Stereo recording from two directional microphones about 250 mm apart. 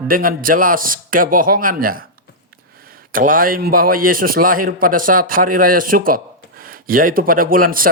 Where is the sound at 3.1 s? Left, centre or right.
Right.